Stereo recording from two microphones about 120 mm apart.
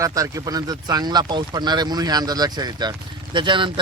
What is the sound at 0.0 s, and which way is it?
Speech, 30° right (ahead or behind).